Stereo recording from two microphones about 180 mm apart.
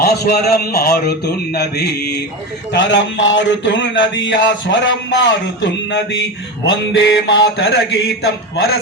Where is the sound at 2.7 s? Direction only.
85° left.